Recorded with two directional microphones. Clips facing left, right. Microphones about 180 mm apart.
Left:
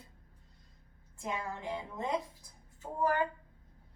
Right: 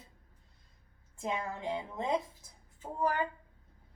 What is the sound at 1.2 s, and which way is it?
A woman's voice, 25° right (ahead or behind).